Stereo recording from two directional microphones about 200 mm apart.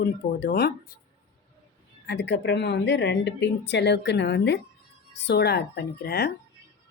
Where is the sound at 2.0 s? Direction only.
60° left (ahead or behind).